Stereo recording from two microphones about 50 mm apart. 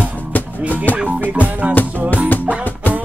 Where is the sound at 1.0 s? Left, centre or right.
Right.